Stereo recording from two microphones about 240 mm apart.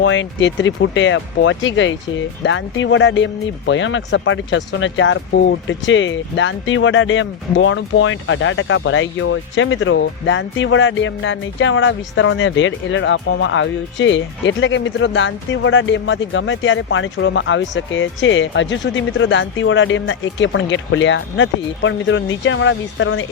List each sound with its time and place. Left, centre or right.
0.0 s speech: left